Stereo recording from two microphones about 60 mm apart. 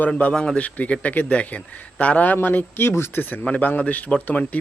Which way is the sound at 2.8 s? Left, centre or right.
Left.